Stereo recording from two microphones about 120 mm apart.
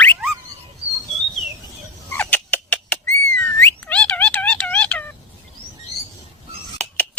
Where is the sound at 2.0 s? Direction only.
15° left (ahead or behind).